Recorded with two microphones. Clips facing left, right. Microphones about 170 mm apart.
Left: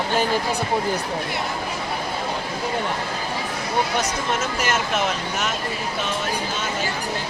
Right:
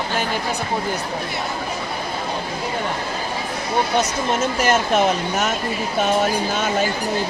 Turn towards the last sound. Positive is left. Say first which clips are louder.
# right 5 dB
turn(degrees=-40)  # may be behind; listen again after turning